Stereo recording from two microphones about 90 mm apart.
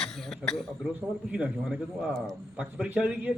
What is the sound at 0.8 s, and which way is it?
A man's voice, 10° right (ahead or behind).